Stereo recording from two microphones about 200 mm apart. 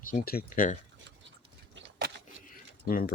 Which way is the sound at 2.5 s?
45° left (ahead or behind).